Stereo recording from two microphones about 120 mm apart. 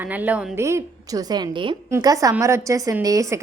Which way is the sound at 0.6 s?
25° right (ahead or behind).